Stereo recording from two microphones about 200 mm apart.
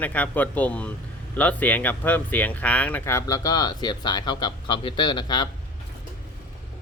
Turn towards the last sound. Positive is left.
turn(degrees=20)  # may be behind; listen again after turning